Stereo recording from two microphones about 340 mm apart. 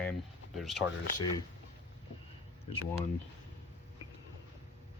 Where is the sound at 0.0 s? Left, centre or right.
Centre.